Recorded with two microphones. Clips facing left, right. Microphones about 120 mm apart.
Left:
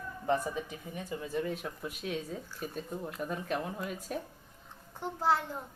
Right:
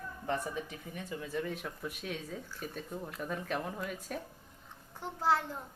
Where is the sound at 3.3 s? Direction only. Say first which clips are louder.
Even; 5° left (ahead or behind).